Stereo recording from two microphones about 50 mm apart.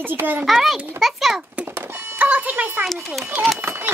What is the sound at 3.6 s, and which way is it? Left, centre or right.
Speech, right.